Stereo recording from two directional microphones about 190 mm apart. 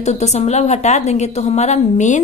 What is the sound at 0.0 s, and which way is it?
A woman's voice, 35° left (ahead or behind).